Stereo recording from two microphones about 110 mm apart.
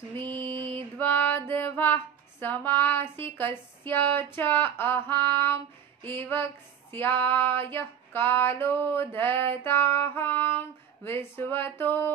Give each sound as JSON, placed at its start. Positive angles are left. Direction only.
{"t": 0.3, "sound": "music", "side_deg": 20}
{"t": 0.9, "sound": "female singing", "side_deg": 20}
{"t": 2.4, "sound": "a sound", "side_deg": 20}